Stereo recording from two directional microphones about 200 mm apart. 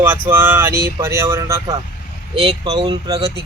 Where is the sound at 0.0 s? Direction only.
10° right (ahead or behind).